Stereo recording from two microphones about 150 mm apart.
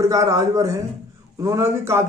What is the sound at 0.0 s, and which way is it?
A man's voice, 25° right (ahead or behind).